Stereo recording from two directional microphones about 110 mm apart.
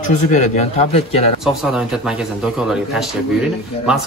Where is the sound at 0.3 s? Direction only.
70° left (ahead or behind).